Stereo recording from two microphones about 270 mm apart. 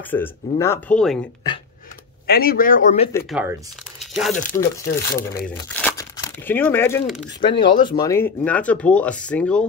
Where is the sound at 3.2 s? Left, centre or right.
Centre.